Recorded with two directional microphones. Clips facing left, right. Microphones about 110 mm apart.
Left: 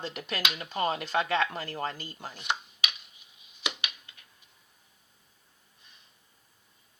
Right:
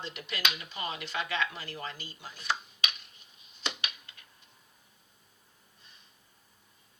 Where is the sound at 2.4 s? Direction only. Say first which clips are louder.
Even; 20° left (ahead or behind).